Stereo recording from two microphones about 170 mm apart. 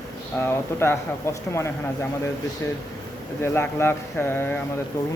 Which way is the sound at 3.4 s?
15° left (ahead or behind).